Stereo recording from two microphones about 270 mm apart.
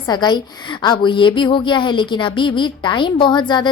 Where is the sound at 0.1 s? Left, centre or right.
Centre.